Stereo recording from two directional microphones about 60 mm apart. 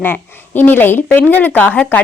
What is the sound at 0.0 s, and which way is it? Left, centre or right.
A woman's voice, left.